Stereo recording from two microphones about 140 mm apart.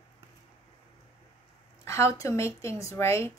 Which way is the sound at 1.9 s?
20° left (ahead or behind).